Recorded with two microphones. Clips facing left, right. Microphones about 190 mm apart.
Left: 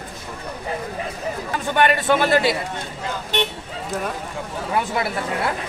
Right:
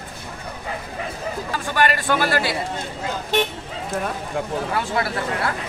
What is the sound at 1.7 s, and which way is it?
Speech, 20° left (ahead or behind).